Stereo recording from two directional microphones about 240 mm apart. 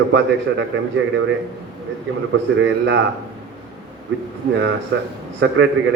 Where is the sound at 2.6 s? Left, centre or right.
Right.